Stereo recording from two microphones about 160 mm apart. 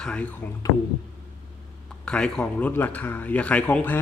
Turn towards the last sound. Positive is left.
turn(degrees=10)  # may be behind; listen again after turning